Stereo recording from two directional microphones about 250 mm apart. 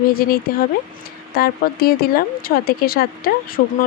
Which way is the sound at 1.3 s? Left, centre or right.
Left.